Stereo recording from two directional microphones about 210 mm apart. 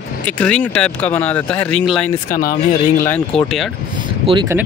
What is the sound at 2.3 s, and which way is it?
Speech, 40° left (ahead or behind).